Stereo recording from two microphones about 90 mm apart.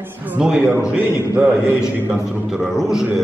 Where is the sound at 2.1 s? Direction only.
5° right (ahead or behind).